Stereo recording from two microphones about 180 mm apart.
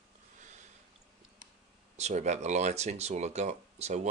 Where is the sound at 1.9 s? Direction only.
40° right (ahead or behind).